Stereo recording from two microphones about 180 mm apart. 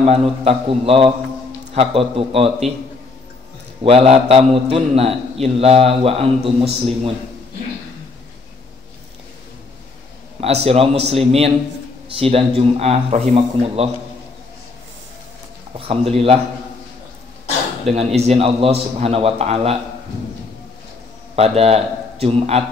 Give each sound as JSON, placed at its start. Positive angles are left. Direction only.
{"t": 0.0, "sound": "a man's voice", "side_deg": -35}
{"t": 3.8, "sound": "a man's voice", "side_deg": -35}
{"t": 10.4, "sound": "a man's voice", "side_deg": -35}
{"t": 15.9, "sound": "a man's voice", "side_deg": -35}
{"t": 17.9, "sound": "a man's voice", "side_deg": -35}
{"t": 21.4, "sound": "a man's voice", "side_deg": -35}